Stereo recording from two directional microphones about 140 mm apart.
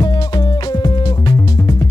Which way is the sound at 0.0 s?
25° left (ahead or behind).